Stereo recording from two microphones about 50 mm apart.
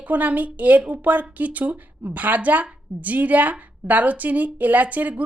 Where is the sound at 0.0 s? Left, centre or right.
Right.